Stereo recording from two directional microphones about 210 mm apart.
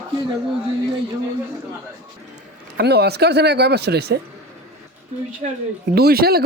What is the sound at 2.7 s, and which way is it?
Speech, 50° right (ahead or behind).